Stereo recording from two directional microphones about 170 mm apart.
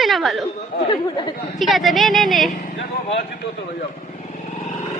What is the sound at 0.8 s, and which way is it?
Speech, 25° left (ahead or behind).